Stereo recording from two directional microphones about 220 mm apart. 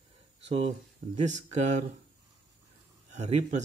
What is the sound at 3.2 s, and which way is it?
Speech, 30° right (ahead or behind).